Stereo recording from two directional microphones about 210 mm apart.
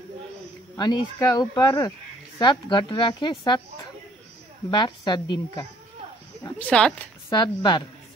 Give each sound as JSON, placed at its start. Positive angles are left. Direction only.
{"t": 0.7, "sound": "speech", "side_deg": 20}
{"t": 4.6, "sound": "speech", "side_deg": 20}
{"t": 6.4, "sound": "speech", "side_deg": 5}
{"t": 7.2, "sound": "speech", "side_deg": 20}